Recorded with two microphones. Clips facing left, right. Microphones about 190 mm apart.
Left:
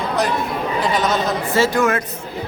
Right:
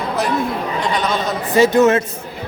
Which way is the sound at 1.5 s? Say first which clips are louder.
Right 6 dB; 20° right (ahead or behind).